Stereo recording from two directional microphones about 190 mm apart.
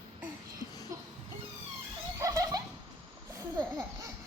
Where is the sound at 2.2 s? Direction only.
15° right (ahead or behind).